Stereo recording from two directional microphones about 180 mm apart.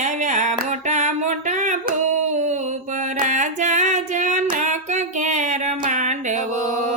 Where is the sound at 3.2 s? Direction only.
45° right (ahead or behind).